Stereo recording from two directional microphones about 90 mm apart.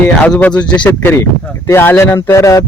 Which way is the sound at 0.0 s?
10° left (ahead or behind).